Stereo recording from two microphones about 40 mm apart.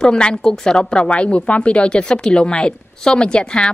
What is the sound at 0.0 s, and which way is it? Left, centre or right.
A woman's voice, left.